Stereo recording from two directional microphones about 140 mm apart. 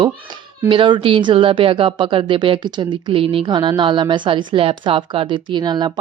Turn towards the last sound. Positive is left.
turn(degrees=-30)  # may be behind; listen again after turning